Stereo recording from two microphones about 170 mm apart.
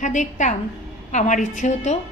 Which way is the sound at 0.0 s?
45° left (ahead or behind).